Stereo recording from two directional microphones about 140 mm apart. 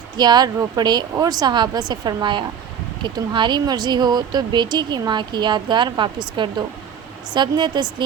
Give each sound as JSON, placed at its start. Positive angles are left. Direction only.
{"t": 0.2, "sound": "speech", "side_deg": -30}